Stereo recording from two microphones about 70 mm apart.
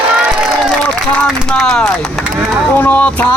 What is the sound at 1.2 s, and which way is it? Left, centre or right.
Speech, centre.